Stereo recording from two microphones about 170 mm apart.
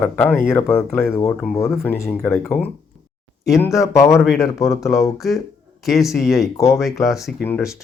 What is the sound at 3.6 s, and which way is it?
Speech, 20° left (ahead or behind).